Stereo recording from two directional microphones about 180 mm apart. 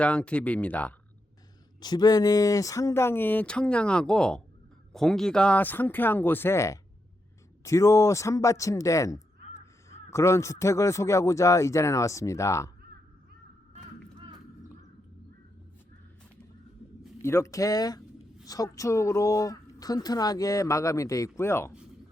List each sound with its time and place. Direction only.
0.0 s speech: 5° left (ahead or behind)
1.8 s speech: 20° left (ahead or behind)
17.2 s speech: 15° left (ahead or behind)